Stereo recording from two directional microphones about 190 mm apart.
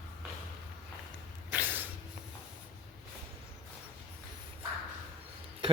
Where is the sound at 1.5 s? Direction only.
10° right (ahead or behind).